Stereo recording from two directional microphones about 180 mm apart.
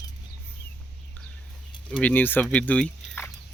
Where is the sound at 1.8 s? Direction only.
10° left (ahead or behind).